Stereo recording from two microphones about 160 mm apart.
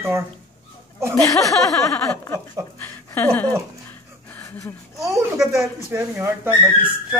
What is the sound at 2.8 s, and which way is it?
Speech, 10° left (ahead or behind).